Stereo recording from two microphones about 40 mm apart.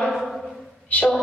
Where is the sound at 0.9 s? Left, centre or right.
Left.